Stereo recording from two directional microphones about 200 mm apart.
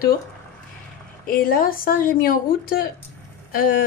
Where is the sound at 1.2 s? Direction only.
45° left (ahead or behind).